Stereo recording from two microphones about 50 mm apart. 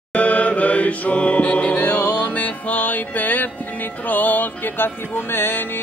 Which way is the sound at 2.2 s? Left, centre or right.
Left.